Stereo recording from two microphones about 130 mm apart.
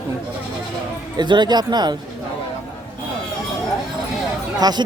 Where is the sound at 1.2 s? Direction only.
35° right (ahead or behind).